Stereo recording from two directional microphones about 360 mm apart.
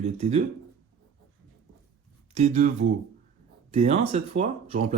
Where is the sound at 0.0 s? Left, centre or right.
Centre.